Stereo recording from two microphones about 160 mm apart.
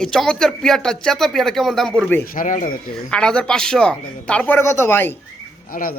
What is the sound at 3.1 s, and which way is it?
Speech, 5° left (ahead or behind).